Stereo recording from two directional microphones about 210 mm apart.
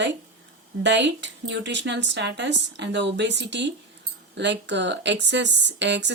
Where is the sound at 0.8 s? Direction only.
55° right (ahead or behind).